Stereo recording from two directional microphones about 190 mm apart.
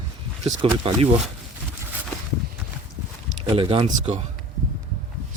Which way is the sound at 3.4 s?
30° right (ahead or behind).